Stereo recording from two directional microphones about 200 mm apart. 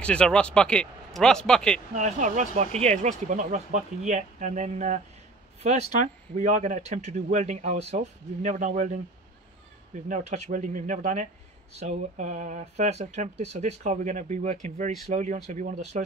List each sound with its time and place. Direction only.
0.0 s a man's voice: 5° left (ahead or behind)
2.0 s speech: 35° right (ahead or behind)
10.0 s speech: 35° right (ahead or behind)